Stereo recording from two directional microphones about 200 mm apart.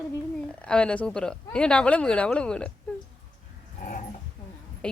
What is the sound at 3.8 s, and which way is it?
Dog, 40° left (ahead or behind).